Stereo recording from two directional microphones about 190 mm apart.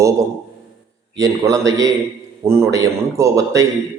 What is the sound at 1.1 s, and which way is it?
A man's voice, 15° right (ahead or behind).